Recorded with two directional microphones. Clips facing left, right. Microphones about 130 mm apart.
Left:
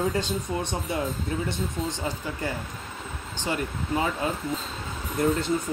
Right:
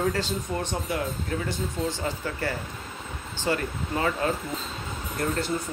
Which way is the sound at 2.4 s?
15° left (ahead or behind).